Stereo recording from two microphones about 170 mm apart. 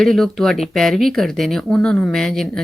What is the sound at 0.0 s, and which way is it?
Speech, centre (ahead or behind).